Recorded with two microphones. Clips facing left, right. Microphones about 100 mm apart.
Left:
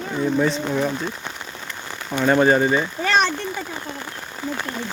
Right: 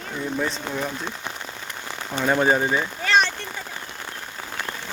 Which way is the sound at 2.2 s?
Centre (ahead or behind).